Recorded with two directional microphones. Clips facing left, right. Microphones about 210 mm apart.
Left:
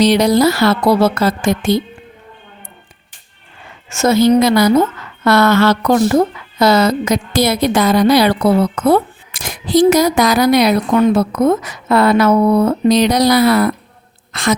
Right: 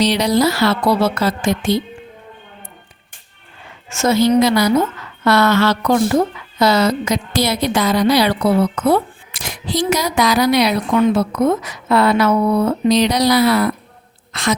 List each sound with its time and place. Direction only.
0.0 s a woman's voice: 50° left (ahead or behind)
3.8 s a woman's voice: 45° left (ahead or behind)
14.3 s a sound: 50° left (ahead or behind)